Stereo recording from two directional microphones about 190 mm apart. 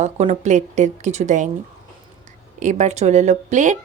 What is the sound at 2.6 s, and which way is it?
A woman's voice, 40° right (ahead or behind).